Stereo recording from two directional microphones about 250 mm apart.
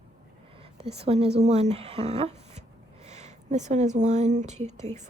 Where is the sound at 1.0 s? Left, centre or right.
Right.